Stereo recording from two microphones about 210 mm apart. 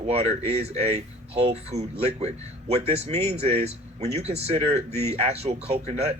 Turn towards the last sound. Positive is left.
turn(degrees=-30)  # may be behind; listen again after turning